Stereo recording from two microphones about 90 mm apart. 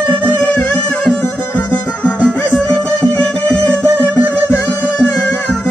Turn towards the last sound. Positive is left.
turn(degrees=20)  # may be behind; listen again after turning